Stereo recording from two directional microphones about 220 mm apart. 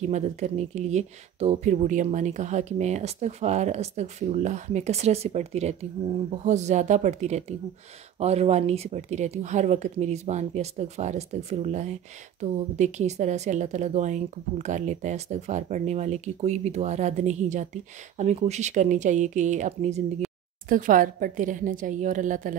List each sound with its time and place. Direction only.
0.1 s speech: 30° right (ahead or behind)